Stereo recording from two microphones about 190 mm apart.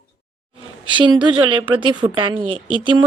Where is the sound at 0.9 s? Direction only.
25° right (ahead or behind).